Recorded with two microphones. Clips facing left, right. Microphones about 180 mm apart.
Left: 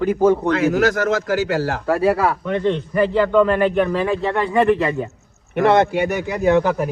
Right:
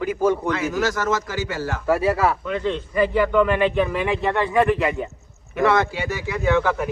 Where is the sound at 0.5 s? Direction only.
60° left (ahead or behind).